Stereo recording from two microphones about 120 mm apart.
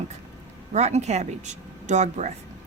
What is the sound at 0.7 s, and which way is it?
Speech, 70° right (ahead or behind).